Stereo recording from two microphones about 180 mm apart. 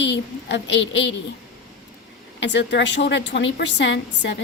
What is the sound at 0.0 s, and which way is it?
A woman's voice, 75° left (ahead or behind).